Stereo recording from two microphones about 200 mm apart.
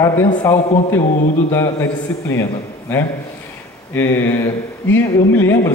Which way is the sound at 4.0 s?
10° left (ahead or behind).